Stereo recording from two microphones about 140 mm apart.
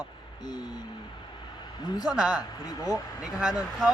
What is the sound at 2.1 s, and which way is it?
Speech, 5° right (ahead or behind).